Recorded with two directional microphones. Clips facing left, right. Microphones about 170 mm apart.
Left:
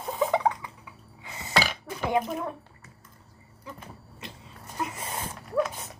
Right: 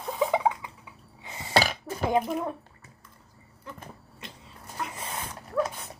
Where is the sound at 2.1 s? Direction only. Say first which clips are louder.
Right 1 dB; 30° right (ahead or behind).